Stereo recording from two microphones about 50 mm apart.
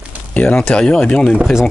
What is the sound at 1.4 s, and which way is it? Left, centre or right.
Speech, centre.